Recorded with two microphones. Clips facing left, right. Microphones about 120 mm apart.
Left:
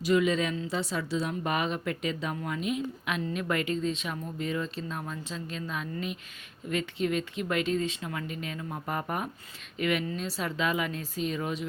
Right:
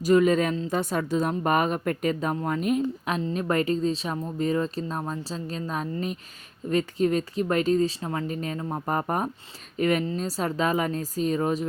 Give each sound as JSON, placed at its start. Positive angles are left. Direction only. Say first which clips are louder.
{"t": 0.0, "sound": "speech", "louder": "right 5 dB", "side_deg": -45}